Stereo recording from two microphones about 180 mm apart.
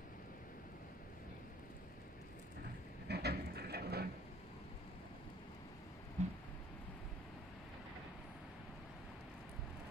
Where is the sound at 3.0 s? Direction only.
65° right (ahead or behind).